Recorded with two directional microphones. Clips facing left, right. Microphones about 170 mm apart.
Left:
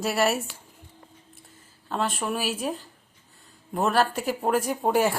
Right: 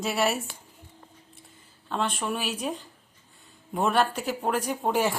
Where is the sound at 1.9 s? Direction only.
Centre (ahead or behind).